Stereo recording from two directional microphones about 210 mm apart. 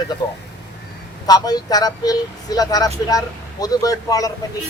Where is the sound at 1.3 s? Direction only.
20° left (ahead or behind).